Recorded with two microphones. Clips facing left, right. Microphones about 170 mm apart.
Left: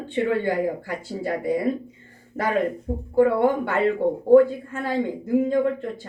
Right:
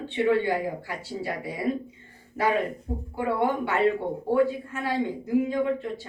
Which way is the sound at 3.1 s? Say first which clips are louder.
Left 7 dB; 50° left (ahead or behind).